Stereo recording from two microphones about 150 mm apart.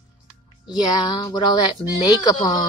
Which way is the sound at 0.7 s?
30° left (ahead or behind).